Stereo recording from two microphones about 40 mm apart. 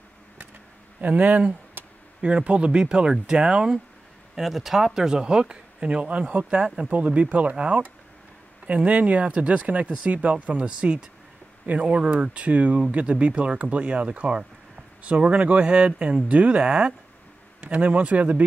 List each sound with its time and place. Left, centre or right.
1.0 s speech: right; by 3.8 s centre
4.4 s speech: centre; by 16.9 s right
17.6 s speech: right